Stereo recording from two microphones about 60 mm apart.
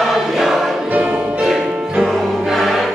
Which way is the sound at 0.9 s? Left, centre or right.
Right.